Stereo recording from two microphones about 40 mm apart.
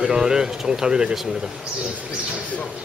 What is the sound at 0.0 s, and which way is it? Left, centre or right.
Speech, centre.